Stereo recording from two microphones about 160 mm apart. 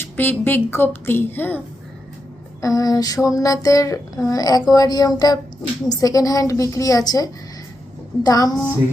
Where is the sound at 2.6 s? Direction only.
20° left (ahead or behind).